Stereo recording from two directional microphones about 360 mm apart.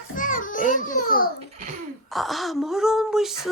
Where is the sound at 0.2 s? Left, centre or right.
Left.